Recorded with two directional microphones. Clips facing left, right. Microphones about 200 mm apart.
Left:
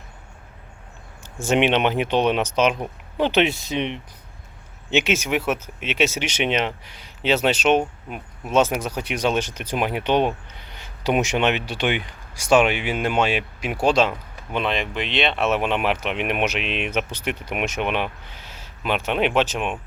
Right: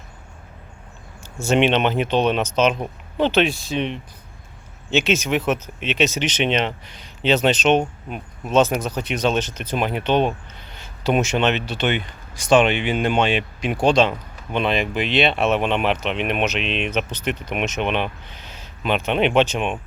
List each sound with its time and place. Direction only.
1.5 s speech: 10° left (ahead or behind)